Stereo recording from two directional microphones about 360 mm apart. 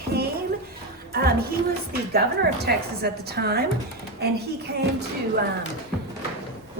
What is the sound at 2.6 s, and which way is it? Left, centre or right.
A woman's voice, right.